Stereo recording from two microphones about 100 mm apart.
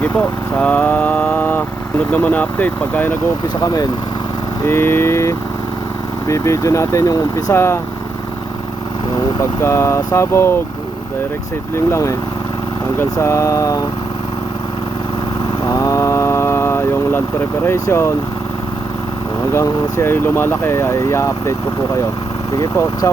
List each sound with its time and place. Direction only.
0.0 s speech: 15° left (ahead or behind)
4.6 s speech: 25° left (ahead or behind)
9.1 s speech: 30° left (ahead or behind)
11.9 s speech: 30° left (ahead or behind)
15.6 s vehicle: 35° left (ahead or behind)
17.8 s speech: 25° left (ahead or behind)
19.5 s speech: 30° left (ahead or behind)
22.6 s speech: 35° left (ahead or behind)